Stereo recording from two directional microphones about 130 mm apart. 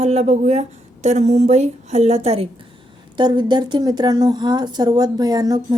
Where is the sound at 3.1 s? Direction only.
35° right (ahead or behind).